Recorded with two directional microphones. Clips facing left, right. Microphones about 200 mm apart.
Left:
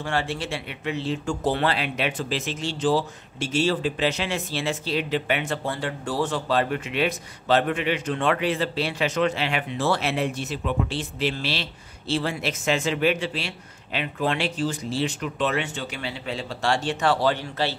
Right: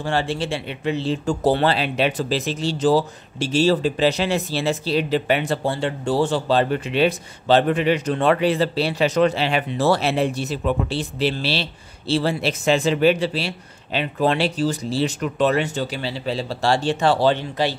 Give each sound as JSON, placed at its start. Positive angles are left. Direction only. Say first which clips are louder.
{"t": 0.0, "sound": "speech", "louder": "right 4 dB", "side_deg": -30}